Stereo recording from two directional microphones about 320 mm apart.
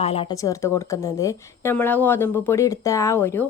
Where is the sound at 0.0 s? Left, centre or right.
Centre.